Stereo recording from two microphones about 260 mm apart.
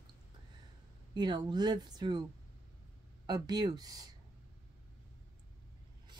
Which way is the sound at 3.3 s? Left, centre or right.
Centre.